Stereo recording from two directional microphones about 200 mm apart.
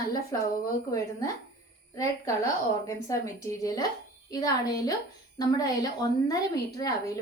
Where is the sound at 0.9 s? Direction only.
15° left (ahead or behind).